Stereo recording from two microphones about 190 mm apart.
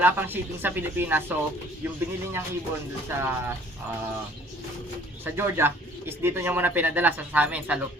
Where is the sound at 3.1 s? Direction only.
10° right (ahead or behind).